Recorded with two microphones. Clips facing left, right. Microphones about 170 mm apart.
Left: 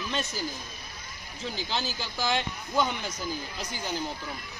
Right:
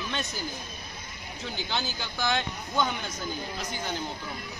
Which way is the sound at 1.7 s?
5° left (ahead or behind).